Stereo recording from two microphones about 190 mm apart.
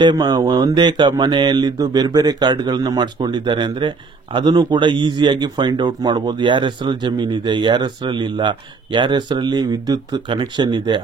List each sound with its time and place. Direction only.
0.0 s speech: 20° right (ahead or behind)